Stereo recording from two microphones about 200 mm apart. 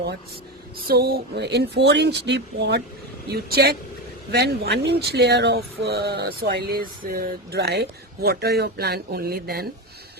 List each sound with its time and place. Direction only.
0.9 s speech: 50° right (ahead or behind)